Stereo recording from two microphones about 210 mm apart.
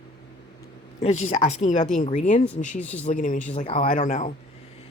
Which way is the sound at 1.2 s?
30° left (ahead or behind).